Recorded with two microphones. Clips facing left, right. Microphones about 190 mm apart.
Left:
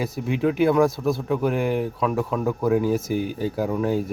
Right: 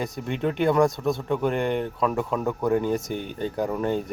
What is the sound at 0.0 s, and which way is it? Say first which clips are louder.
Speech: left 4 dB; 5° left (ahead or behind).